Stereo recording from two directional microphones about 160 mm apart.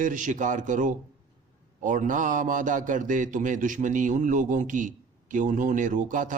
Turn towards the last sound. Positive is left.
turn(degrees=-55)  # may be behind; listen again after turning